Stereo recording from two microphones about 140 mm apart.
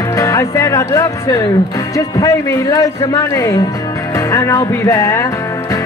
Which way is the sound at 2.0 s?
25° left (ahead or behind).